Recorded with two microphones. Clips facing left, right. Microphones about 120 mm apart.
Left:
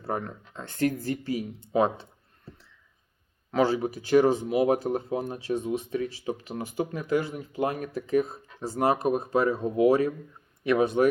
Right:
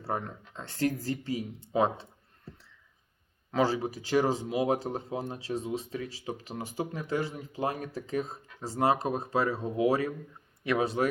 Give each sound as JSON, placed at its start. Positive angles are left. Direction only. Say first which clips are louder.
{"t": 0.2, "sound": "speech", "louder": "left 3 dB", "side_deg": 45}
{"t": 0.6, "sound": "speech", "louder": "left 3 dB", "side_deg": -30}
{"t": 3.5, "sound": "speech", "louder": "left 3 dB", "side_deg": -30}